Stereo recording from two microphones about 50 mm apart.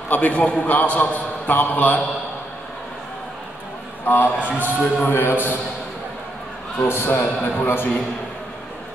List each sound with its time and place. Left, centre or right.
0.1 s a man's voice: left
4.0 s a man's voice: left
6.8 s a man's voice: left